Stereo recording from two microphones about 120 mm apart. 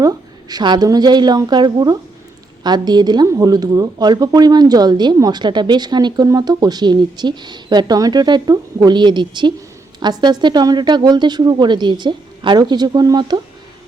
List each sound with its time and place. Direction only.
0.0 s a woman's voice: 35° right (ahead or behind)